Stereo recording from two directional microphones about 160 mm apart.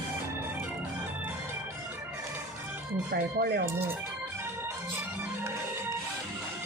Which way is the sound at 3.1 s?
85° right.